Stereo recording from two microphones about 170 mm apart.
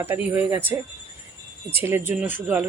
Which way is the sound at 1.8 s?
15° right (ahead or behind).